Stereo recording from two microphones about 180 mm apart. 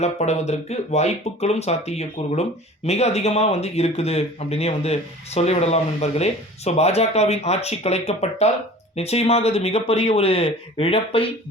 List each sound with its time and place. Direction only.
0.0 s speech: 40° left (ahead or behind)